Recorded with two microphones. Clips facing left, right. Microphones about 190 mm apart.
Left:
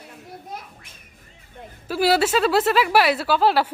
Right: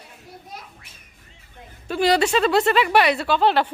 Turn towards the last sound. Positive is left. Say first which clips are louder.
# even
turn(degrees=5)  # may be behind; listen again after turning